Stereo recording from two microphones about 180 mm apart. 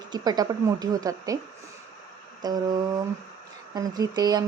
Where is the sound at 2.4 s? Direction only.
20° right (ahead or behind).